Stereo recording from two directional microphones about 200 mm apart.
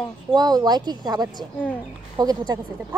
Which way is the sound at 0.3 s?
20° right (ahead or behind).